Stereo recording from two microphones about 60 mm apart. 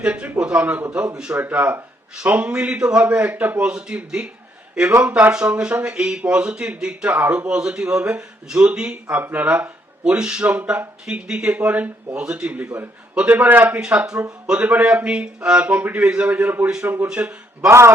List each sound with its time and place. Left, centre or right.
0.0 s speech: centre
1.4 s a man's voice: right
3.6 s speech: centre
5.0 s a man's voice: right
5.3 s speech: centre
7.1 s speech: right
10.6 s a man's voice: right
11.0 s a man's voice: centre
12.6 s speech: right
13.2 s a man's voice: right
13.7 s a man's voice: centre
16.8 s speech: right
17.1 s a man's voice: right
17.6 s a man's voice: right